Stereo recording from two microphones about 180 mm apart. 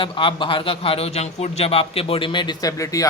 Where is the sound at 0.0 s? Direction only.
30° left (ahead or behind).